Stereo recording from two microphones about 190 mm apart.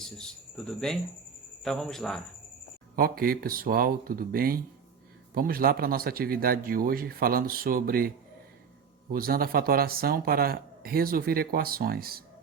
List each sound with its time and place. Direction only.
0.0 s a man's voice: 5° left (ahead or behind)
2.9 s speech: 50° right (ahead or behind)
9.1 s speech: 50° right (ahead or behind)